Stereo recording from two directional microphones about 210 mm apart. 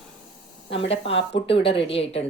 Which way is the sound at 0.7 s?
25° left (ahead or behind).